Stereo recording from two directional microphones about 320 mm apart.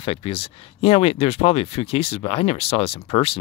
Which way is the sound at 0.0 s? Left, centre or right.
Centre.